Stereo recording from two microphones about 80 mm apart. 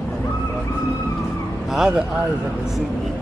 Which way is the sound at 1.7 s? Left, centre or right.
Centre.